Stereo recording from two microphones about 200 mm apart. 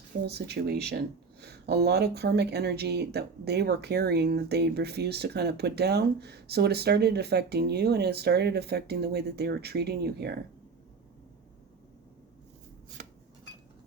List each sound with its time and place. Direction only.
0.3 s speech: 55° right (ahead or behind)